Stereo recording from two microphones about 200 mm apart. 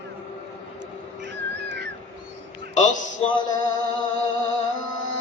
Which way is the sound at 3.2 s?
30° left (ahead or behind).